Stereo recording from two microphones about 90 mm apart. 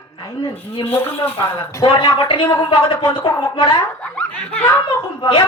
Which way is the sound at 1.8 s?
65° left (ahead or behind).